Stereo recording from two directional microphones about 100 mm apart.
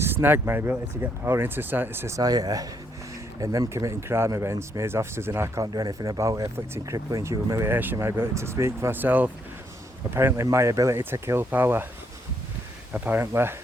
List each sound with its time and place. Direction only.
0.0 s speech: 20° right (ahead or behind)
5.7 s speech: 40° right (ahead or behind); by 11.9 s 20° right (ahead or behind)
12.9 s speech: 20° right (ahead or behind)